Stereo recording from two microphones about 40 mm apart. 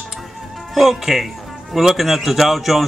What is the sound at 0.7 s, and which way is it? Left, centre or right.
Speech, centre.